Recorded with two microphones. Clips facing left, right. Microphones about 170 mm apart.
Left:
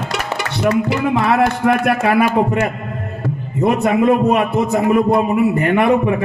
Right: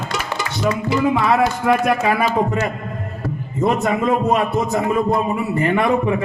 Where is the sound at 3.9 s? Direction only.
65° left (ahead or behind).